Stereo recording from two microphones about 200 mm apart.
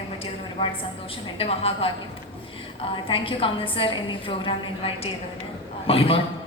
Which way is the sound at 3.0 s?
25° left (ahead or behind).